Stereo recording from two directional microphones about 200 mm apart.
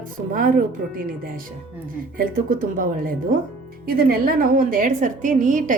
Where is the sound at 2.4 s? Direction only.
45° right (ahead or behind).